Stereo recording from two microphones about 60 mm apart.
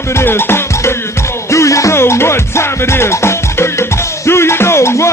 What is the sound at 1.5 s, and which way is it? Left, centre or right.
Music, left.